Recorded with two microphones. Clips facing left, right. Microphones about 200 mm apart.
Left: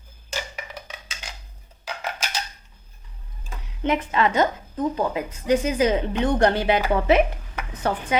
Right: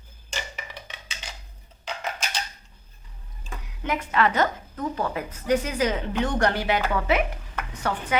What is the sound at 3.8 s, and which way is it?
A woman's voice, 20° left (ahead or behind).